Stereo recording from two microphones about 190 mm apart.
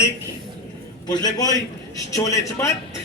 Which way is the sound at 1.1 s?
20° left (ahead or behind).